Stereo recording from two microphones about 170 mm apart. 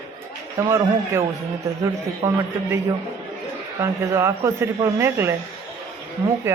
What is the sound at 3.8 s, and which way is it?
Speech, 15° right (ahead or behind).